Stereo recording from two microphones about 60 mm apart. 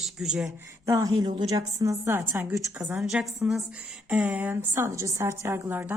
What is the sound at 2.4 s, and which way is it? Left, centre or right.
Speech, right.